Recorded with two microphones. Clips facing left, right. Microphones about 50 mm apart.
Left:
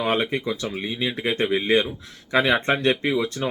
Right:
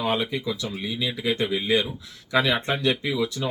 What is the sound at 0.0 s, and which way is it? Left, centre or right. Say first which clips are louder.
Speech: left 2 dB; left.